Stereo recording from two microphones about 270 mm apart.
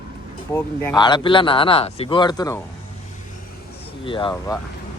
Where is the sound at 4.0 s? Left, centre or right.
Centre.